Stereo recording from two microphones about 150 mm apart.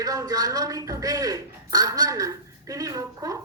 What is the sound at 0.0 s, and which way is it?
Speech, 25° right (ahead or behind).